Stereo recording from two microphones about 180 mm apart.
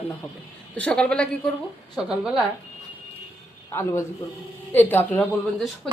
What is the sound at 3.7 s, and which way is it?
A woman's voice, 15° left (ahead or behind).